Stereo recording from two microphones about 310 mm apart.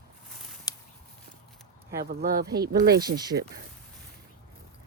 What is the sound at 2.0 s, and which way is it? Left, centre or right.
Speech, right.